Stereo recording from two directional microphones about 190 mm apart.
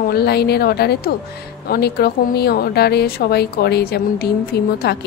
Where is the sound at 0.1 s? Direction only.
55° left (ahead or behind).